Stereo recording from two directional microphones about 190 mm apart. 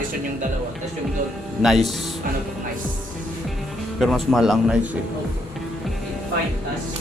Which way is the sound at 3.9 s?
Centre (ahead or behind).